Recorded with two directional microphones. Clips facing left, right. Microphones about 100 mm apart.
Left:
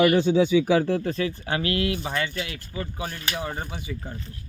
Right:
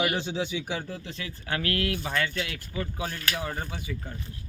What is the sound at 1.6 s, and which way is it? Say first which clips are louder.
Speech: left 3 dB; 10° left (ahead or behind).